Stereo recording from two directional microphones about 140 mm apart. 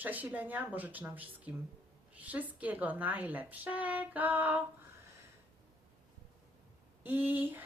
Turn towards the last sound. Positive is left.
turn(degrees=-15)  # may be behind; listen again after turning